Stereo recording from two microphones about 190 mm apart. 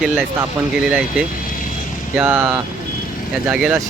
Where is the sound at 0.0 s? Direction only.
10° right (ahead or behind).